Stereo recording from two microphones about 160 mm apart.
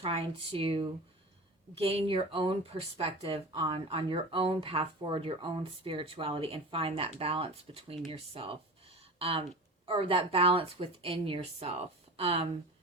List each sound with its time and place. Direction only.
0.0 s speech: 35° right (ahead or behind)